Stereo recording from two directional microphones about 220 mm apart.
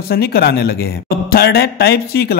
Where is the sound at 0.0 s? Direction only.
45° left (ahead or behind).